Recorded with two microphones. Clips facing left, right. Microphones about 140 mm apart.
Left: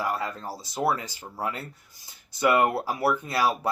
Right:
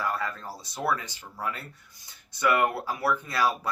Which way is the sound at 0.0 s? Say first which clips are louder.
Left 2 dB; 25° left (ahead or behind).